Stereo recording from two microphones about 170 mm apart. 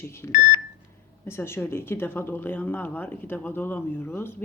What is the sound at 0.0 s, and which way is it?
Speech, 15° left (ahead or behind).